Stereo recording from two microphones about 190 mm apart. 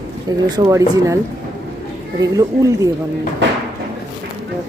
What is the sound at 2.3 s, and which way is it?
Speech, 15° right (ahead or behind).